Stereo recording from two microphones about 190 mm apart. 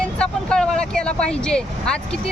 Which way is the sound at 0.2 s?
5° left (ahead or behind).